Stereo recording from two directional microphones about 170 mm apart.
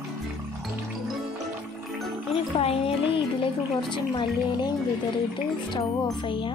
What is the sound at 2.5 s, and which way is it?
Speech, 35° left (ahead or behind).